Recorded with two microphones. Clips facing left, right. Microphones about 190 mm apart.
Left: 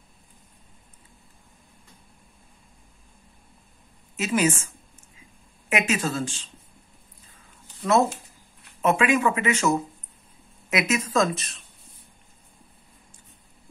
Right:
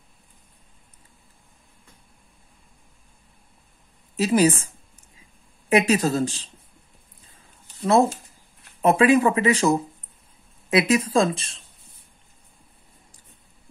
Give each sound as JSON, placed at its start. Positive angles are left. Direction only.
{"t": 4.2, "sound": "speech", "side_deg": -35}
{"t": 7.8, "sound": "speech", "side_deg": -30}